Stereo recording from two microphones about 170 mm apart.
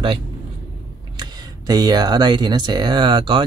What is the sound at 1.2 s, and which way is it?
Speech, 25° right (ahead or behind).